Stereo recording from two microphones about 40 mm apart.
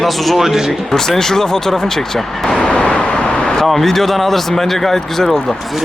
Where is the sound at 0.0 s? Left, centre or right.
Centre.